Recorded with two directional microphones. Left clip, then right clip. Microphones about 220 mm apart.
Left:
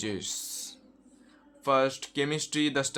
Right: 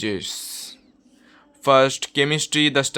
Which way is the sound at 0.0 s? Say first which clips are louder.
Right 8 dB; 30° right (ahead or behind).